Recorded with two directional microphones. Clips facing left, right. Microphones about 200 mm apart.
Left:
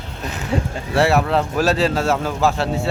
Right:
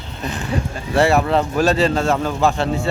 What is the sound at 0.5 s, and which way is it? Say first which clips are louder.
Speech: left 3 dB; 25° left (ahead or behind).